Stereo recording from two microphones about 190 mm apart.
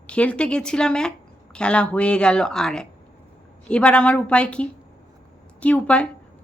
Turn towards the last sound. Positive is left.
turn(degrees=5)  # may be behind; listen again after turning